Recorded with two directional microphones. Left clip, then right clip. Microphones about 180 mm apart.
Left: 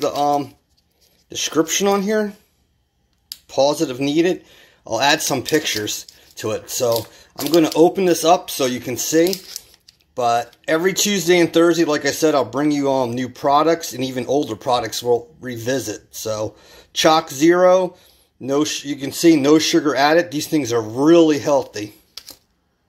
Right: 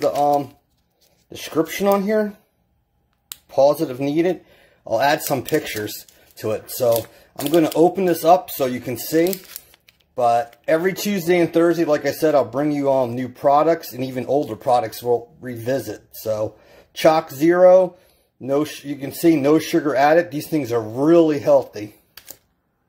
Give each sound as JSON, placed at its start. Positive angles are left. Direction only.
{"t": 0.1, "sound": "speech", "side_deg": -5}
{"t": 1.7, "sound": "speech", "side_deg": -5}
{"t": 3.4, "sound": "speech", "side_deg": -10}